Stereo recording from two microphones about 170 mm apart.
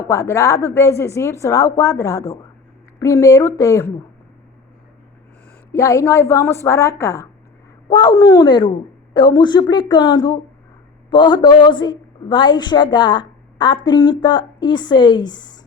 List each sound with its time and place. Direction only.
0.1 s a woman's voice: 15° left (ahead or behind)
5.7 s a woman's voice: 15° left (ahead or behind)